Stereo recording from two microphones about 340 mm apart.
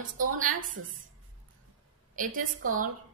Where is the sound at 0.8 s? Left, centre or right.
Right.